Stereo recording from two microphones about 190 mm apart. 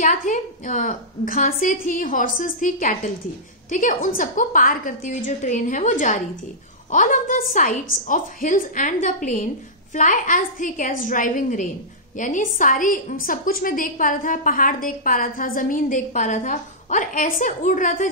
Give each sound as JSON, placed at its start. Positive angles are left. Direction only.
{"t": 0.0, "sound": "a woman's voice", "side_deg": 45}